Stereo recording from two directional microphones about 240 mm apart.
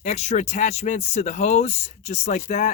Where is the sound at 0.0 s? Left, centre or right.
Left.